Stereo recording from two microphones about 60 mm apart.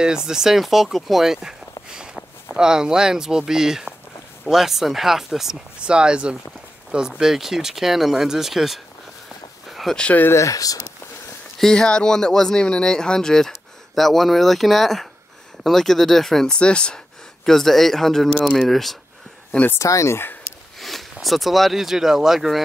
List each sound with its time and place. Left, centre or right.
0.0 s speech: centre
9.7 s a sound: centre
10.3 s speech: left
11.5 s speech: centre
17.5 s speech: centre
19.8 s speech: left
20.8 s speech: centre